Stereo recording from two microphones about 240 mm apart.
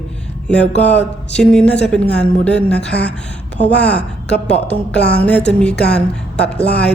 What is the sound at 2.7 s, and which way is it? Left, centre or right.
A woman's voice, left.